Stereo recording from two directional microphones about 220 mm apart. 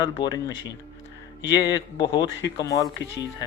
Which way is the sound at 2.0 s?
20° left (ahead or behind).